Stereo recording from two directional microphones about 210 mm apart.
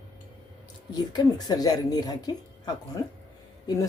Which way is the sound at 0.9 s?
20° left (ahead or behind).